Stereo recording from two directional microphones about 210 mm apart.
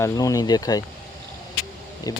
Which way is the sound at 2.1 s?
15° left (ahead or behind).